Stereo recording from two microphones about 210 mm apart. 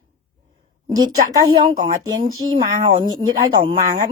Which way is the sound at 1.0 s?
20° right (ahead or behind).